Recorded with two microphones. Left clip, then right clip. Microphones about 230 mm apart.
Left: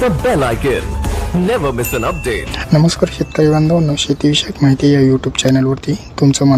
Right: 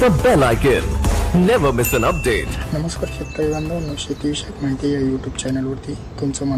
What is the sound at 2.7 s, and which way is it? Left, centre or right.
Speech, left.